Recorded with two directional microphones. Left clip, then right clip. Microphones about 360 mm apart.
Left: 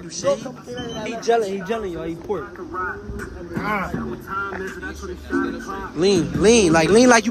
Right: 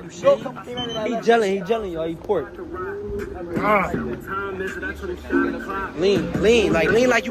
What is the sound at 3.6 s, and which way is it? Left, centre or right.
Speech, centre.